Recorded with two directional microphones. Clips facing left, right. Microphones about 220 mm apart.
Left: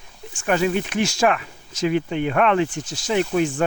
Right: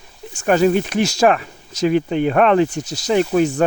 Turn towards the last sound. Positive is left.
turn(degrees=-40)  # may be behind; listen again after turning